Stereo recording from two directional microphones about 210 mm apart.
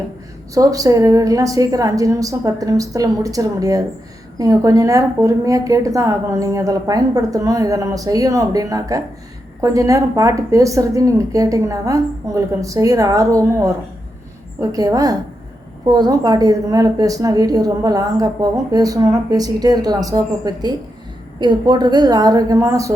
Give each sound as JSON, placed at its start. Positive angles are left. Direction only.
{"t": 0.5, "sound": "a woman's voice", "side_deg": -15}